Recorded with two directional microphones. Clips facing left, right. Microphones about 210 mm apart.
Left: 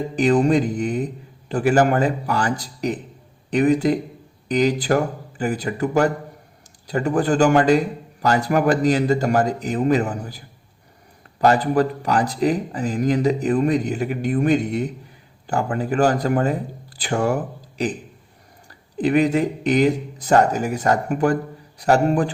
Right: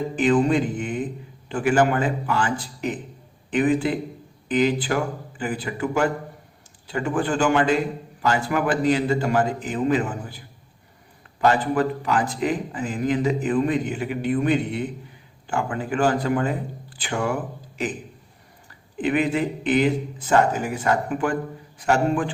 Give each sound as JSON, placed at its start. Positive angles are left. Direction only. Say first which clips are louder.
{"t": 0.2, "sound": "speech", "louder": "left 3 dB", "side_deg": 40}
{"t": 18.9, "sound": "speech", "louder": "left 4 dB", "side_deg": 40}